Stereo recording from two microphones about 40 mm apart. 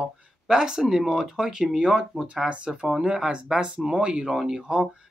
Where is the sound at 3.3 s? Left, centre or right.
Right.